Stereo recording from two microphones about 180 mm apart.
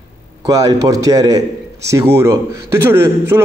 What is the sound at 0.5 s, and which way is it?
A man's voice, 20° right (ahead or behind).